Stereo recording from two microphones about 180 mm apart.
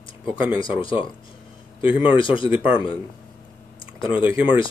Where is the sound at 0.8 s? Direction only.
30° left (ahead or behind).